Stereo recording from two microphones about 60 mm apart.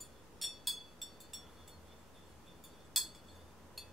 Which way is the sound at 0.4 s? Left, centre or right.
Centre.